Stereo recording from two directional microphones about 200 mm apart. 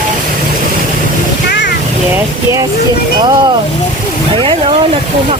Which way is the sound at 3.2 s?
20° right (ahead or behind).